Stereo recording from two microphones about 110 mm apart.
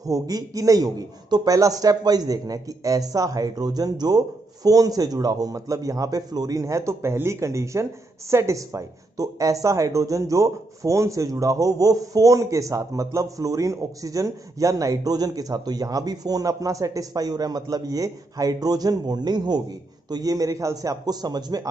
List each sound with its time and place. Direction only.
0.0 s a man's voice: 35° right (ahead or behind)